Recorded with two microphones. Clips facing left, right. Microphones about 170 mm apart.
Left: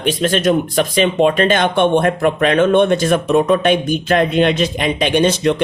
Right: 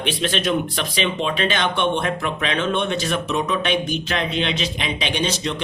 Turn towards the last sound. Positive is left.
turn(degrees=55)  # may be behind; listen again after turning